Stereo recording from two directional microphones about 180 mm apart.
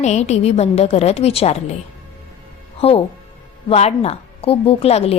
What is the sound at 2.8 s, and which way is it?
A woman's voice, 35° left (ahead or behind).